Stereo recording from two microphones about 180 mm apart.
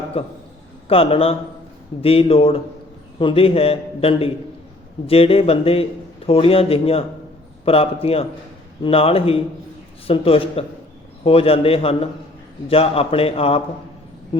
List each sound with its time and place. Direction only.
0.1 s a man's voice: 30° left (ahead or behind)